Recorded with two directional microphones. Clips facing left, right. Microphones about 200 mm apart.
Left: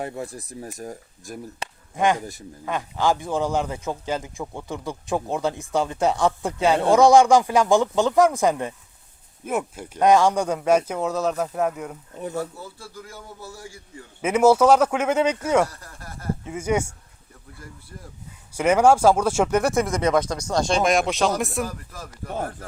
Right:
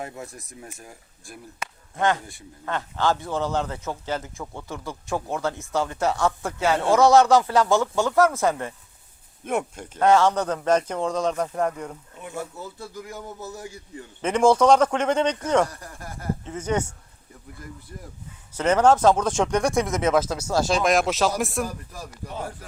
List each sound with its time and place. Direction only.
0.0 s speech: 30° left (ahead or behind)
2.0 s a man's voice: 15° left (ahead or behind)
9.4 s a man's voice: 5° left (ahead or behind)
12.5 s a man's voice: 20° right (ahead or behind)
14.2 s a man's voice: 5° left (ahead or behind)
15.7 s speech: 15° right (ahead or behind)
16.4 s a man's voice: 10° left (ahead or behind)
18.5 s speech: 10° left (ahead or behind)
21.7 s speech: 15° right (ahead or behind)